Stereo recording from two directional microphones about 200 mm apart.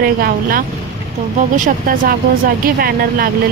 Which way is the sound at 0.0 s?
45° right (ahead or behind).